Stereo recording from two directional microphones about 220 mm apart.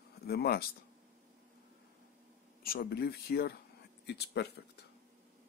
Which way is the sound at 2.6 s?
45° left (ahead or behind).